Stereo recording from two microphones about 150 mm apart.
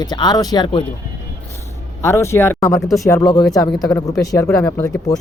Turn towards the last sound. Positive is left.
turn(degrees=20)  # may be behind; listen again after turning